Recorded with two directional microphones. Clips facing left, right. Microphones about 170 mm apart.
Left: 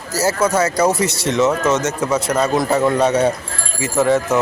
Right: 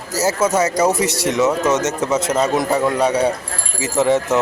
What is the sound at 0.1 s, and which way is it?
Speech, 20° right (ahead or behind).